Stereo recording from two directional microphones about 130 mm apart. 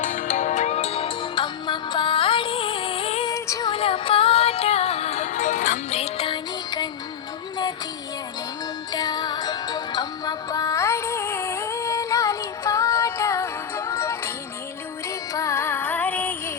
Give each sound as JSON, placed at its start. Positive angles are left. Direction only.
{"t": 0.0, "sound": "music", "side_deg": 70}
{"t": 3.2, "sound": "music", "side_deg": 25}
{"t": 3.7, "sound": "music", "side_deg": 45}
{"t": 5.9, "sound": "music", "side_deg": 50}
{"t": 8.9, "sound": "music", "side_deg": 30}
{"t": 15.3, "sound": "music", "side_deg": 25}